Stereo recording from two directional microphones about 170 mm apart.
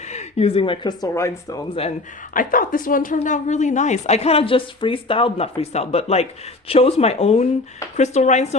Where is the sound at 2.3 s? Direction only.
55° left (ahead or behind).